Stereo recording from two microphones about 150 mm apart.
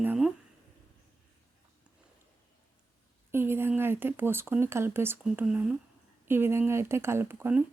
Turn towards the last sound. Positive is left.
turn(degrees=-10)  # may be behind; listen again after turning